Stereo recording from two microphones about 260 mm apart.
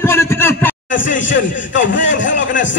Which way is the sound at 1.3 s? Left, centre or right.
Left.